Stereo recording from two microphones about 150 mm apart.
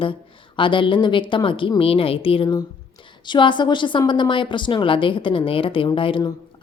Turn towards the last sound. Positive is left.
turn(degrees=35)  # may be behind; listen again after turning